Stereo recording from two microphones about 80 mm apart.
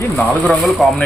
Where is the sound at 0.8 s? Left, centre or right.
Centre.